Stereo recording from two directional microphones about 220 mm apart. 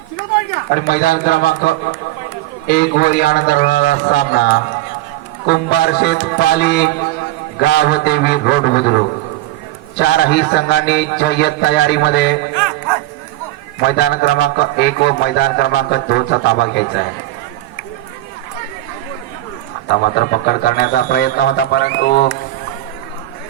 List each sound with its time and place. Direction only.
0.7 s a man's voice: 40° left (ahead or behind)
13.7 s a man's voice: 45° left (ahead or behind)
19.9 s a man's voice: 45° left (ahead or behind)